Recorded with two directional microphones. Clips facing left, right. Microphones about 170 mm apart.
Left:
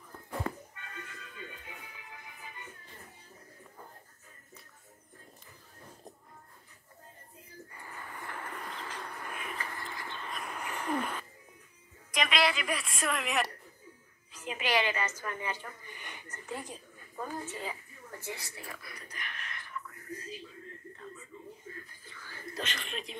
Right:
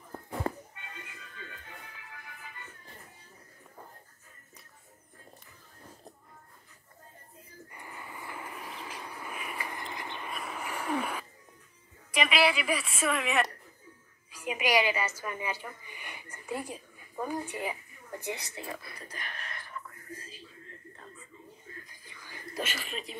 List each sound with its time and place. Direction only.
0.7 s music: 20° right (ahead or behind)
1.4 s music: 20° left (ahead or behind)
7.7 s bird: 15° right (ahead or behind)
12.1 s a woman's voice: 5° right (ahead or behind)
14.3 s a woman's voice: 10° right (ahead or behind)
18.2 s a sound: 20° right (ahead or behind)
21.8 s a sound: 15° right (ahead or behind)